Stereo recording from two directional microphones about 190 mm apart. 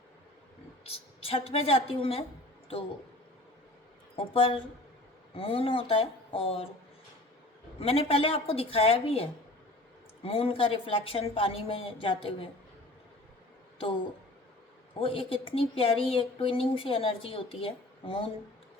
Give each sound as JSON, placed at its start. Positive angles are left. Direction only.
{"t": 0.9, "sound": "a woman's voice", "side_deg": 30}
{"t": 4.1, "sound": "speech", "side_deg": 30}
{"t": 7.8, "sound": "speech", "side_deg": 30}
{"t": 10.2, "sound": "speech", "side_deg": 30}
{"t": 15.0, "sound": "speech", "side_deg": 30}